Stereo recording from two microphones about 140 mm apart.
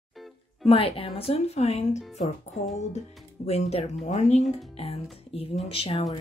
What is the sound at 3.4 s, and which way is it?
A woman's voice, 50° left (ahead or behind).